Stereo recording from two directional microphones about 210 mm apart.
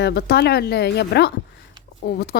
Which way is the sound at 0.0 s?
50° left (ahead or behind).